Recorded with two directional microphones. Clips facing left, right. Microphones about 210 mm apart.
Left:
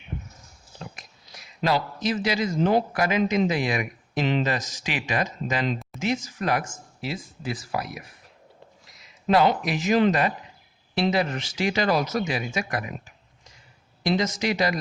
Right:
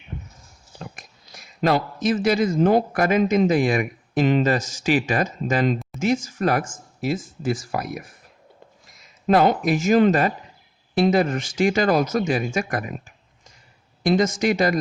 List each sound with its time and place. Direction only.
0.9 s speech: 50° right (ahead or behind)
14.0 s speech: 50° right (ahead or behind)